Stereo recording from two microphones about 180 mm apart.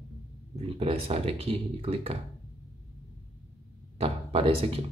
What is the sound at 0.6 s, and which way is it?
Speech, 30° right (ahead or behind).